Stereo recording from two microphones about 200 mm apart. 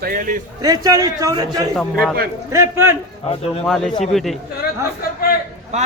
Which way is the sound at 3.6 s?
Centre (ahead or behind).